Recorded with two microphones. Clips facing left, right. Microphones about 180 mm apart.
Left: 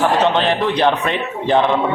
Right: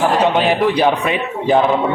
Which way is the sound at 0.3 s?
10° right (ahead or behind).